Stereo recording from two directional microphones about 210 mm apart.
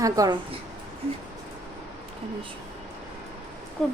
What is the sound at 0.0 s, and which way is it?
Speech, 15° right (ahead or behind).